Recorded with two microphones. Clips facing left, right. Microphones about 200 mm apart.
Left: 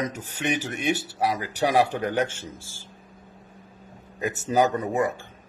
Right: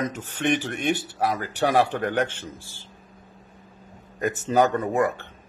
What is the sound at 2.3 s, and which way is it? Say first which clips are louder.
Speech: right 1 dB; 40° left (ahead or behind).